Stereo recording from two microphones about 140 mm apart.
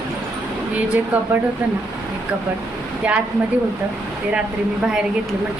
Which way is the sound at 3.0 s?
10° right (ahead or behind).